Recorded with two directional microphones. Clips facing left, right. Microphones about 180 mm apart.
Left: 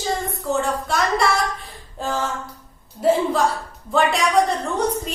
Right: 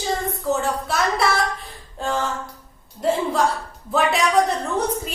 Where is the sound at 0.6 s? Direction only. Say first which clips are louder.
Even; centre (ahead or behind).